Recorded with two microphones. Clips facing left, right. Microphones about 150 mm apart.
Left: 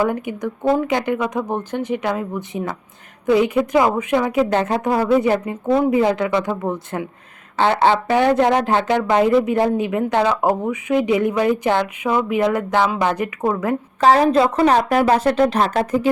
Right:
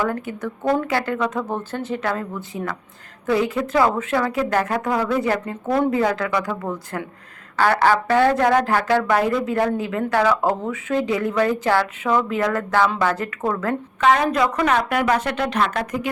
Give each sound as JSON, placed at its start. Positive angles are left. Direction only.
{"t": 0.0, "sound": "a woman's voice", "side_deg": 15}
{"t": 14.0, "sound": "a woman's voice", "side_deg": 35}